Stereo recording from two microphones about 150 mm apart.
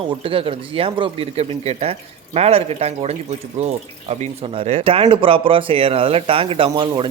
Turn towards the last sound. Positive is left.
turn(degrees=-30)  # may be behind; listen again after turning